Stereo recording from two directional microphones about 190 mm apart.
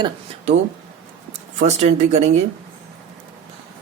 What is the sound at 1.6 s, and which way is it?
Speech, 35° right (ahead or behind).